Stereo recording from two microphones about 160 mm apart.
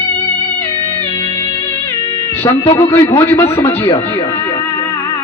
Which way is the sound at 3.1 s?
15° left (ahead or behind).